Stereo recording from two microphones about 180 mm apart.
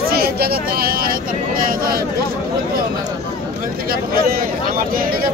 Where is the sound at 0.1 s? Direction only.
60° right (ahead or behind).